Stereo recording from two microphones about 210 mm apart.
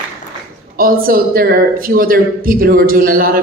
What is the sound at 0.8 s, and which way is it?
A woman's voice, 45° right (ahead or behind).